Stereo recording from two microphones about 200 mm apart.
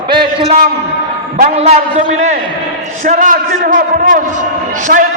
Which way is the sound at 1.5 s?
30° right (ahead or behind).